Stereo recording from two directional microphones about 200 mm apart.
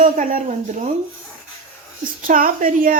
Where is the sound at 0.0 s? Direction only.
40° right (ahead or behind).